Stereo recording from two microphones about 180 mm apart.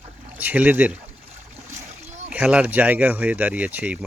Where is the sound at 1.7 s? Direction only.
40° right (ahead or behind).